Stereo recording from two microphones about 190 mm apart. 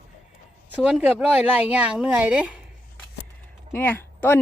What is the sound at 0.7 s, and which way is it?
A woman's voice, 5° right (ahead or behind).